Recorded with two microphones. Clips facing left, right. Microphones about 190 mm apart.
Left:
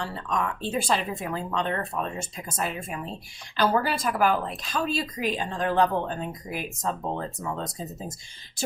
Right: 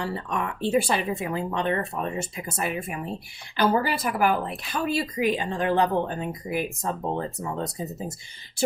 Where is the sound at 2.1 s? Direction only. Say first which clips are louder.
Right 4 dB; 60° right (ahead or behind).